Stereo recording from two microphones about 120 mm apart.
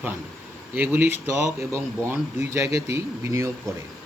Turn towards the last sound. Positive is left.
turn(degrees=-25)  # may be behind; listen again after turning